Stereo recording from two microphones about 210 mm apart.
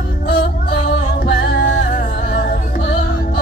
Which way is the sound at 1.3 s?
50° left (ahead or behind).